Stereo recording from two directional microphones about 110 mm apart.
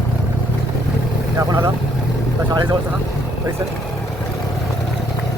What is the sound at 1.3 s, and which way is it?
Vehicle, 35° right (ahead or behind).